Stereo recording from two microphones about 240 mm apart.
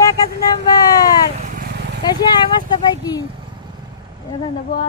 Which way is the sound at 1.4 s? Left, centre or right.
Right.